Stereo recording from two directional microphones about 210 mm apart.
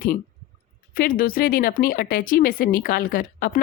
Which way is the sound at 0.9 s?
40° left (ahead or behind).